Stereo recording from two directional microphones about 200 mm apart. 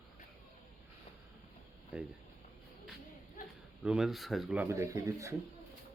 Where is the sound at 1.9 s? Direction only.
5° right (ahead or behind).